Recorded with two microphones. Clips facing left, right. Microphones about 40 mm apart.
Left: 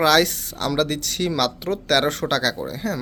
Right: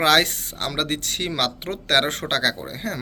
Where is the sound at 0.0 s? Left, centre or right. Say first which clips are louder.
Left 1 dB; right.